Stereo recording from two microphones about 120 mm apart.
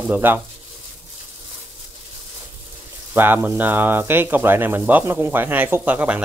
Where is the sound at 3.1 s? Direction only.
15° right (ahead or behind).